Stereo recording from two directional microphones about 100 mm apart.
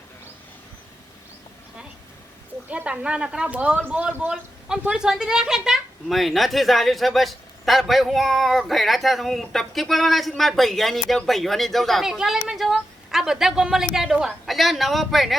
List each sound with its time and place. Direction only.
2.6 s speech: 10° right (ahead or behind)